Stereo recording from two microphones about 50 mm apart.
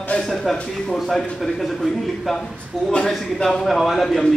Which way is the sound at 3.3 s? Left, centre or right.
Centre.